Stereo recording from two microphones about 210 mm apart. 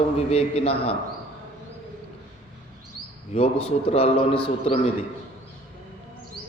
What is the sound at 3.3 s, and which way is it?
Mantra, 30° left (ahead or behind).